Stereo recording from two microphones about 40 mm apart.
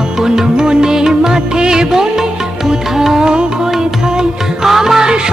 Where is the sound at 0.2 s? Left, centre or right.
Centre.